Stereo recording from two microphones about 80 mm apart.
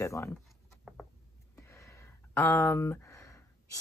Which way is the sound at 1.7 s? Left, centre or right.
Left.